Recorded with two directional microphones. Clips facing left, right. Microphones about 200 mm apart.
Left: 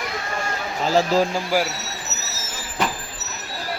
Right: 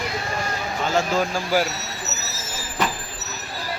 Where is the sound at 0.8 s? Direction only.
35° left (ahead or behind).